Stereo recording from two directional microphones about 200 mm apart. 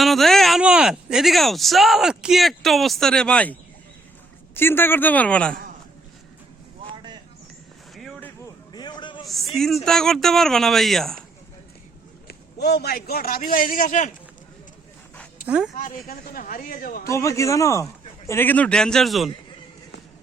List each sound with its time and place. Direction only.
0.0 s a man's voice: centre (ahead or behind)
7.9 s a sound: centre (ahead or behind)
8.7 s a sound: 20° left (ahead or behind)
9.2 s a sound: centre (ahead or behind)
9.6 s speech: centre (ahead or behind)
12.3 s a man's voice: 55° left (ahead or behind)
15.4 s speech: 5° right (ahead or behind)
15.7 s a man's voice: 45° left (ahead or behind)
17.0 s a man's voice: 15° left (ahead or behind)